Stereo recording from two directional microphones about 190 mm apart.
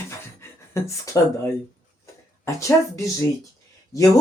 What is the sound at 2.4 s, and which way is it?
Speech, 15° left (ahead or behind).